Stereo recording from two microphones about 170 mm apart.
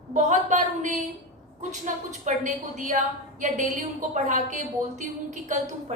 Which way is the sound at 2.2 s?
50° right (ahead or behind).